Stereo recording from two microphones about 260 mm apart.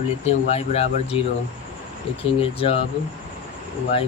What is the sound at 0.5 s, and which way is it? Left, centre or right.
Speech, left.